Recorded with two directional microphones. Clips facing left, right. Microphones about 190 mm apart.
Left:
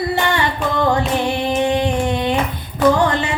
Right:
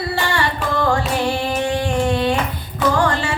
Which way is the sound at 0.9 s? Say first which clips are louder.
Left 1 dB; 20° left (ahead or behind).